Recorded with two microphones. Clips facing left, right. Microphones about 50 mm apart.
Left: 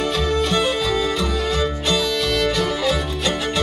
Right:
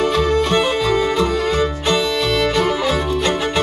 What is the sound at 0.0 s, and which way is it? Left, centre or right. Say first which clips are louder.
Music: right 4 dB; right.